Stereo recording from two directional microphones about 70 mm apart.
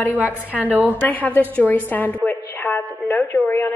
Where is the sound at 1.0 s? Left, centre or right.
Left.